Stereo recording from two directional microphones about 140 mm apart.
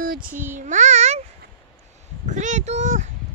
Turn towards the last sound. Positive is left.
turn(degrees=-55)  # may be behind; listen again after turning